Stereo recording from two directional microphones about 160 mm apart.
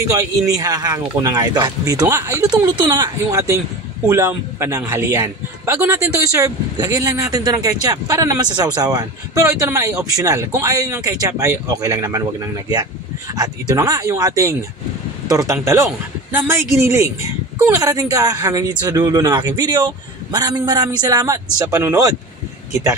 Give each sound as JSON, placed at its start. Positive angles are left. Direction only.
{"t": 0.1, "sound": "a man's voice", "side_deg": -20}